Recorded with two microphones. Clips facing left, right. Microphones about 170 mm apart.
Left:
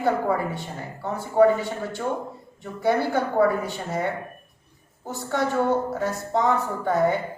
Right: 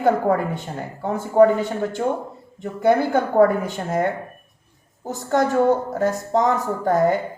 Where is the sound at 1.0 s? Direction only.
50° right (ahead or behind).